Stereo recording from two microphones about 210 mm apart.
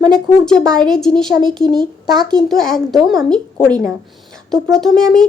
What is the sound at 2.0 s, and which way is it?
Speech, 20° right (ahead or behind).